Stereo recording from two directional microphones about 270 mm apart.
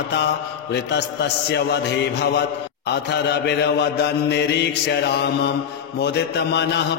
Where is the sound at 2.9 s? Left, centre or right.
Left.